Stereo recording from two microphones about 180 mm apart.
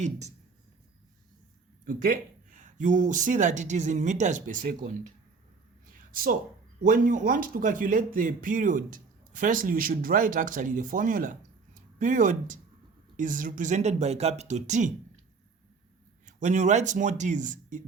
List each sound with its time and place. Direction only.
0.0 s speech: 40° right (ahead or behind)
1.8 s speech: 50° right (ahead or behind)
6.1 s speech: 50° right (ahead or behind)
16.2 s a man's voice: 45° right (ahead or behind)